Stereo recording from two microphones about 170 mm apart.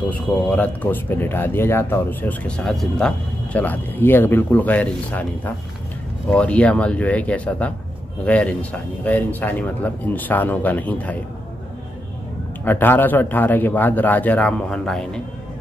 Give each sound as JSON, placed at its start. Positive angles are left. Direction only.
{"t": 0.1, "sound": "speech", "side_deg": 10}
{"t": 12.6, "sound": "speech", "side_deg": 10}